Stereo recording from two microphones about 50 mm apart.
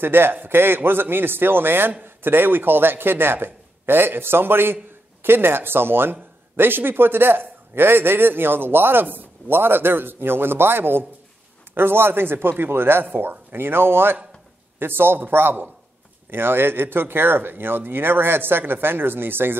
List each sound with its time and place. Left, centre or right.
0.0 s a man's voice: right